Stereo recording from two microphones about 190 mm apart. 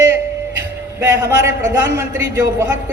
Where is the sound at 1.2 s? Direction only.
15° right (ahead or behind).